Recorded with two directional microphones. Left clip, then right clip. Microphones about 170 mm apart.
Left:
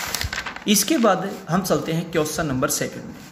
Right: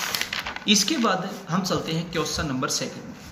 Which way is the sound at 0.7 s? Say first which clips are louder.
Left 3 dB; 45° left (ahead or behind).